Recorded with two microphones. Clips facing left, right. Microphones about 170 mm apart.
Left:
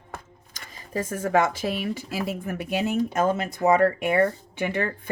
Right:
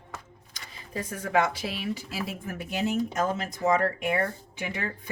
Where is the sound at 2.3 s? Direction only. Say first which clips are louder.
Left 6 dB; 60° left (ahead or behind).